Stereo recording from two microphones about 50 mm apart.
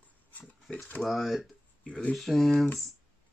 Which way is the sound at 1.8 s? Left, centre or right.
Left.